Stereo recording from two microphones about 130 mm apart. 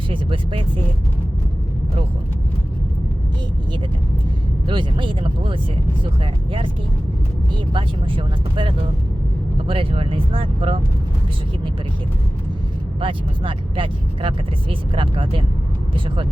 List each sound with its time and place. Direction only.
0.1 s speech: 45° right (ahead or behind)
4.6 s speech: 40° right (ahead or behind)
7.5 s speech: 40° right (ahead or behind)
13.0 s speech: 40° right (ahead or behind)